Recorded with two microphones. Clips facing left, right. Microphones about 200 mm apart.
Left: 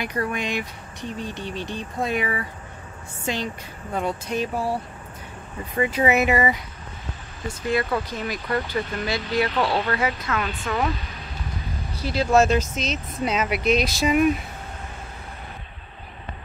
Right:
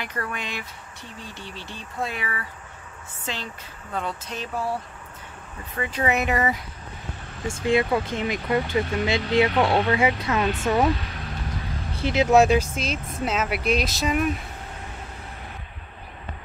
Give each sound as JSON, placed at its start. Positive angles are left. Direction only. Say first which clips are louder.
{"t": 0.0, "sound": "speech", "louder": "left 5 dB", "side_deg": 15}
{"t": 3.9, "sound": "speech", "louder": "left 5 dB", "side_deg": 10}
{"t": 5.8, "sound": "speech", "louder": "left 4 dB", "side_deg": 10}
{"t": 8.0, "sound": "speech", "louder": "right 3 dB", "side_deg": -25}
{"t": 11.9, "sound": "speech", "louder": "right 2 dB", "side_deg": -25}